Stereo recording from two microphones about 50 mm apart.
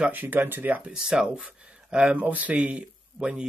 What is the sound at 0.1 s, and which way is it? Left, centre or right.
Speech, right.